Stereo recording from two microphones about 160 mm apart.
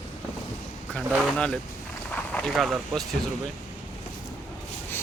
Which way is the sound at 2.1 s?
5° left (ahead or behind).